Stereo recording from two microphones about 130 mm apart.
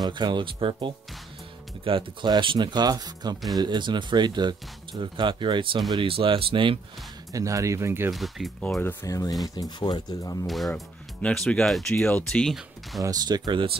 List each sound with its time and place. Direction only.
0.0 s speech: 35° right (ahead or behind)
7.3 s speech: 25° right (ahead or behind)
8.1 s speech: centre (ahead or behind)
8.6 s speech: 10° left (ahead or behind)
9.0 s speech: 25° left (ahead or behind)
10.4 s speech: centre (ahead or behind)
13.0 s speech: 30° right (ahead or behind)